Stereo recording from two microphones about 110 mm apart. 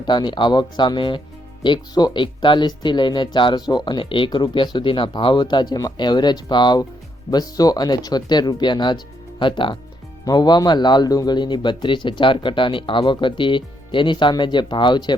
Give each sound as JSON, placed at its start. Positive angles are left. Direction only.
{"t": 0.0, "sound": "speech", "side_deg": 45}